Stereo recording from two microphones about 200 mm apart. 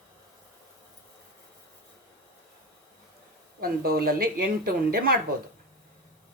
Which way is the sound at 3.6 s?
50° right (ahead or behind).